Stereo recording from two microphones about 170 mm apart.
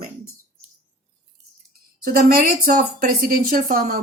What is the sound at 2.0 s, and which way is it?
Speech, 60° right (ahead or behind).